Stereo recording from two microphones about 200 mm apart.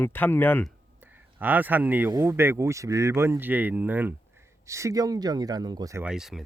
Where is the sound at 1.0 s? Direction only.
10° right (ahead or behind).